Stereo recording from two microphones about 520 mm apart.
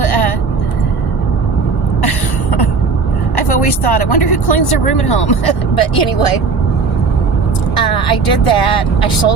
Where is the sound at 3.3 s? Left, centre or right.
Left.